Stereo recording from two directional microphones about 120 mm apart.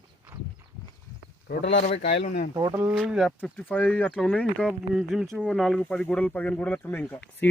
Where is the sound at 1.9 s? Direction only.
60° left (ahead or behind); by 2.5 s 75° left (ahead or behind).